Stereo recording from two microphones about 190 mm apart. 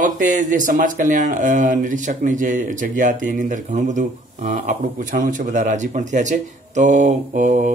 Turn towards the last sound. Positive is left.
turn(degrees=-40)  # may be behind; listen again after turning